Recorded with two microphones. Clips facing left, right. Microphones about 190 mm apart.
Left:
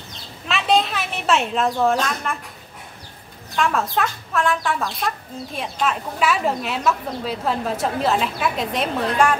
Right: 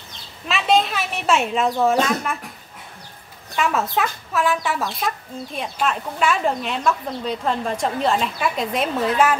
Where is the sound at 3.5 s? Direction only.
5° right (ahead or behind).